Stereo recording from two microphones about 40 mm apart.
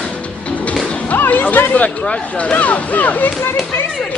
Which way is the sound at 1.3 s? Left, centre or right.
Left.